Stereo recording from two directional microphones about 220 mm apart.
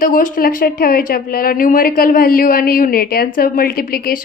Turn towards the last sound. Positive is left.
turn(degrees=40)  # may be behind; listen again after turning